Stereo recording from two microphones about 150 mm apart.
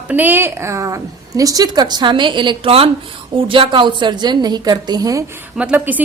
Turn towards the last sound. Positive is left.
turn(degrees=-10)  # may be behind; listen again after turning